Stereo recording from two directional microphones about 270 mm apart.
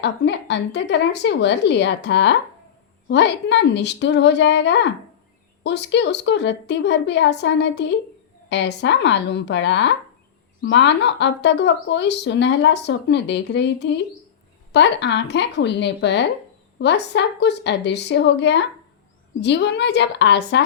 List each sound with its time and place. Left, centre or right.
0.0 s a woman's voice: left